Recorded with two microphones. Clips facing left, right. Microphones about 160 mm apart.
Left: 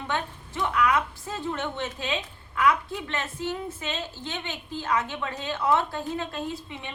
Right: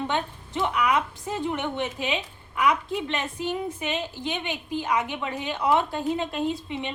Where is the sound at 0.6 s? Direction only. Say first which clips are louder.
Even; 20° right (ahead or behind).